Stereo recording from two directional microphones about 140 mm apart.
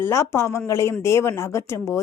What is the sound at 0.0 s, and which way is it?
A woman's voice, 20° left (ahead or behind).